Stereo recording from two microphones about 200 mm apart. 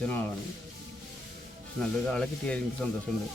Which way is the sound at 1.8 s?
5° left (ahead or behind).